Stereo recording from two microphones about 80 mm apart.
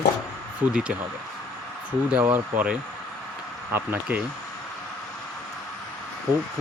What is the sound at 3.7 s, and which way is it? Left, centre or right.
Speech, right.